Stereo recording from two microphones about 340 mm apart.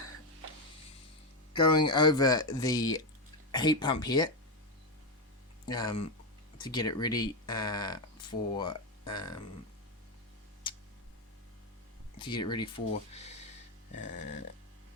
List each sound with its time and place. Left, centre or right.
1.5 s speech: centre
5.6 s speech: centre
10.6 s tick: centre
12.2 s speech: centre
14.2 s a sound: left